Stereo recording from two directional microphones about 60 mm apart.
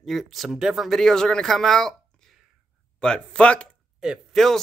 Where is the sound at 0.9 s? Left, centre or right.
Centre.